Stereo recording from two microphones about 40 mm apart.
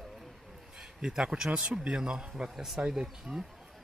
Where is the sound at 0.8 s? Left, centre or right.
Centre.